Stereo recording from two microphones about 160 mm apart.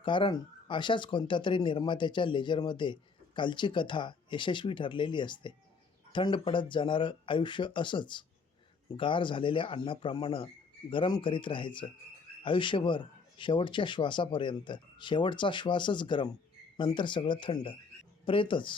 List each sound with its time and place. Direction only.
0.0 s speech: 30° left (ahead or behind)